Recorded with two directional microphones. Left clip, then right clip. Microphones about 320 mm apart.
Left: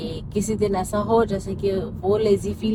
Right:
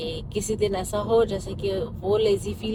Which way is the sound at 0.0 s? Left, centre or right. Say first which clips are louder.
Left 2 dB; centre.